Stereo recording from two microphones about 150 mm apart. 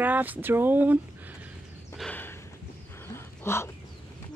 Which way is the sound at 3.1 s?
15° left (ahead or behind).